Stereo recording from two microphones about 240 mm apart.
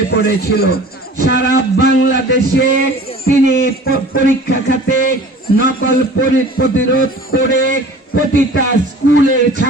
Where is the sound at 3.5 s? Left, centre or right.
Left.